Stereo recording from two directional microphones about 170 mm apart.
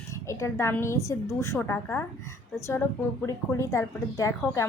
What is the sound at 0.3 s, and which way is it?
A woman's voice, 15° left (ahead or behind).